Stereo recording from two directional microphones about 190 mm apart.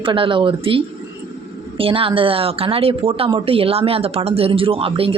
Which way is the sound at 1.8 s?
30° right (ahead or behind).